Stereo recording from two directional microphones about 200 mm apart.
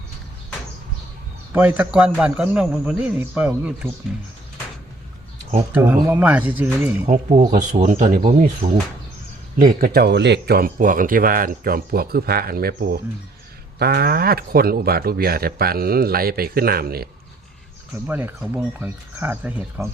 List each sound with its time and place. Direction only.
1.5 s a man's voice: 10° right (ahead or behind)
5.7 s a man's voice: 10° right (ahead or behind)
7.1 s speech: 35° right (ahead or behind)
18.1 s a man's voice: 10° right (ahead or behind)